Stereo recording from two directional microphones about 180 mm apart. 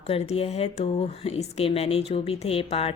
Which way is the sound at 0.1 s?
35° left (ahead or behind).